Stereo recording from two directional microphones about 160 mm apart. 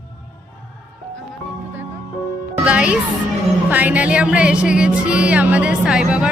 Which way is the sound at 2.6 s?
5° right (ahead or behind).